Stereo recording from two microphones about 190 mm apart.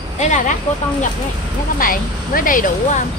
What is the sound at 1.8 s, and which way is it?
Speech, 45° left (ahead or behind).